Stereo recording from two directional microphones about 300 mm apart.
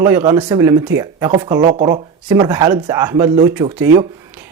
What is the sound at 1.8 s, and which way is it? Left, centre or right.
Speech, centre.